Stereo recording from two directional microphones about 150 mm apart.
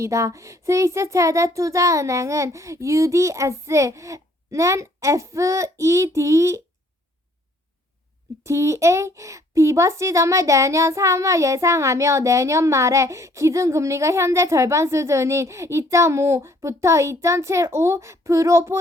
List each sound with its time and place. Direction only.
0.0 s a child's voice: 20° right (ahead or behind)
8.4 s a child's voice: 20° right (ahead or behind)